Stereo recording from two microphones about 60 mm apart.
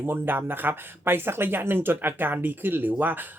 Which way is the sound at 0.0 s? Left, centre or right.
Right.